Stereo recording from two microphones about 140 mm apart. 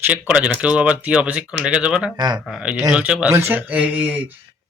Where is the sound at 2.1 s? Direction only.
30° right (ahead or behind).